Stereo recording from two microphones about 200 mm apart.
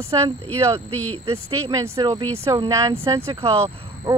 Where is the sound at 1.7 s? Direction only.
20° right (ahead or behind).